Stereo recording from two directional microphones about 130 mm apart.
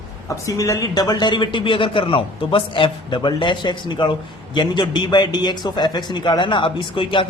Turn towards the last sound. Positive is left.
turn(degrees=40)  # may be behind; listen again after turning